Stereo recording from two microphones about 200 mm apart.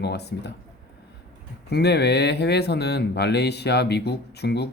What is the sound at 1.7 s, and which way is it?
Speech, 55° left (ahead or behind).